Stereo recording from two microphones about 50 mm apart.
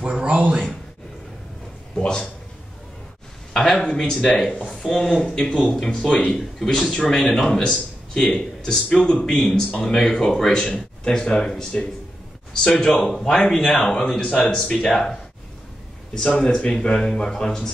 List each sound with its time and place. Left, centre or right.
0.0 s a sound: right
2.0 s speech: centre
3.5 s speech: centre
6.3 s speech: centre
9.3 s speech: centre
12.8 s speech: centre
16.3 s speech: left